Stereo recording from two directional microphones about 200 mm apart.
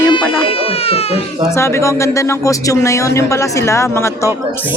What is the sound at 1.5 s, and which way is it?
Speech, 15° left (ahead or behind).